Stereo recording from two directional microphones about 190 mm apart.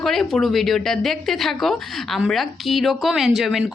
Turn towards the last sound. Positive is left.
turn(degrees=0)  # may be behind; listen again after turning